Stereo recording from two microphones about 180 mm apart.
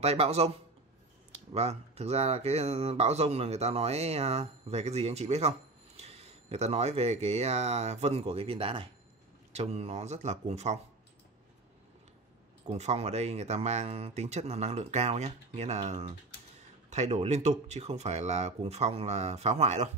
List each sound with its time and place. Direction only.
0.0 s speech: 35° right (ahead or behind)
1.5 s speech: 35° right (ahead or behind)
12.6 s speech: 35° right (ahead or behind)